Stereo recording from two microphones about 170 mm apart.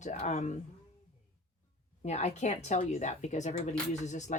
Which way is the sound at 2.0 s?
40° left (ahead or behind).